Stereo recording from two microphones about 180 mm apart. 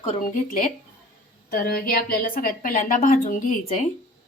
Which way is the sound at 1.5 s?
60° left (ahead or behind).